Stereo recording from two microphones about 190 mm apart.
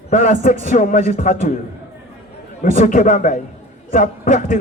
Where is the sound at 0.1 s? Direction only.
40° left (ahead or behind).